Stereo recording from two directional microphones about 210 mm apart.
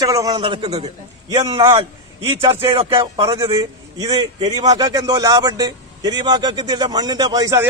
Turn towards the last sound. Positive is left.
turn(degrees=-15)  # may be behind; listen again after turning